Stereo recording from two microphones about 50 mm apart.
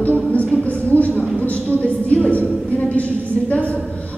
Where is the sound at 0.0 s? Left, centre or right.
Left.